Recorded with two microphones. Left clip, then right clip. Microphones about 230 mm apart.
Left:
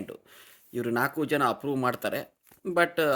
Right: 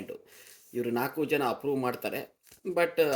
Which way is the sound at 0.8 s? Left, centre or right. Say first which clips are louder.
Left 3 dB; left.